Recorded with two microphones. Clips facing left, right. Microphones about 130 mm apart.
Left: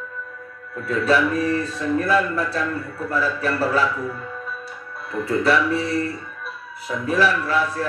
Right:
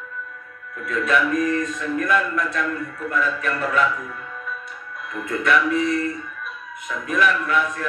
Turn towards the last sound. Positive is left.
turn(degrees=30)  # may be behind; listen again after turning